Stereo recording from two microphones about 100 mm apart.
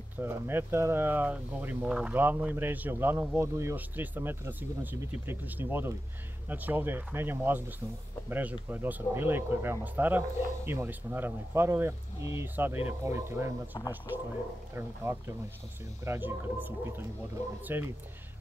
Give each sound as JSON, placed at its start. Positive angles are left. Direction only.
{"t": 0.2, "sound": "speech", "side_deg": -25}
{"t": 2.2, "sound": "speech", "side_deg": -20}
{"t": 13.7, "sound": "speech", "side_deg": 50}
{"t": 14.8, "sound": "speech", "side_deg": -25}